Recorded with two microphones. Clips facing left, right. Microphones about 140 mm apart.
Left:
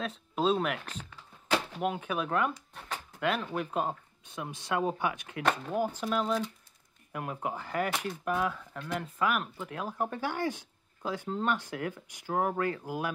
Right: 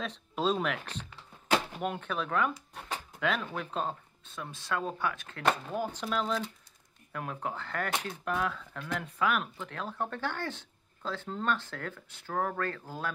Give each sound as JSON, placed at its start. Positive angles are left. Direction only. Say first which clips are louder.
{"t": 0.0, "sound": "speech", "louder": "left 2 dB", "side_deg": 5}
{"t": 1.8, "sound": "speech", "louder": "left 2 dB", "side_deg": 5}